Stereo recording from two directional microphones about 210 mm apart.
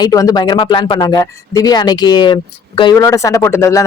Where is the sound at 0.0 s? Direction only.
15° left (ahead or behind).